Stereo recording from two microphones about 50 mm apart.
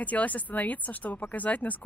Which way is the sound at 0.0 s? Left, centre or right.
Left.